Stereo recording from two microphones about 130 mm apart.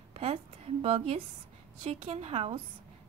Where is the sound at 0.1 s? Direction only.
50° right (ahead or behind).